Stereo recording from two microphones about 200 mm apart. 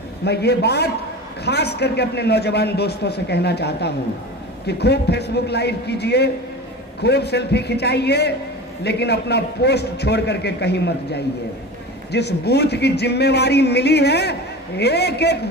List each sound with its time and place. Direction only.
0.2 s a man's voice: 55° left (ahead or behind)